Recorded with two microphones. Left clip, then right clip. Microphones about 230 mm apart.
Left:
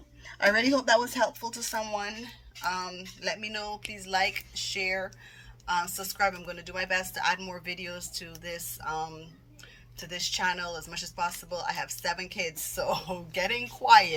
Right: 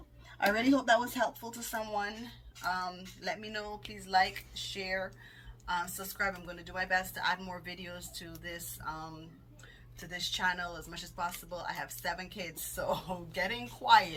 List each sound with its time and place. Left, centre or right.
0.3 s speech: left